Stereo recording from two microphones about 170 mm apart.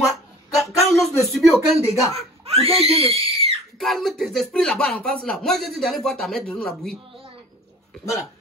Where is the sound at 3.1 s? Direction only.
35° right (ahead or behind).